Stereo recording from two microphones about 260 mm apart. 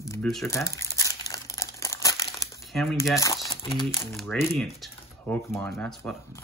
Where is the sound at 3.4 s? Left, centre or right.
Centre.